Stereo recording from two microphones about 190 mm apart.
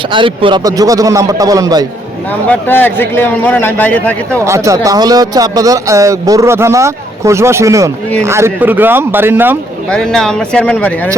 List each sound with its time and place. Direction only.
0.1 s speech: 25° right (ahead or behind)
2.5 s a man's voice: 10° left (ahead or behind)
4.4 s speech: 15° right (ahead or behind)
9.9 s speech: 5° left (ahead or behind)